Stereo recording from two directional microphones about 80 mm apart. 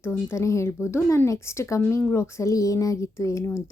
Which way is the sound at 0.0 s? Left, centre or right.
Left.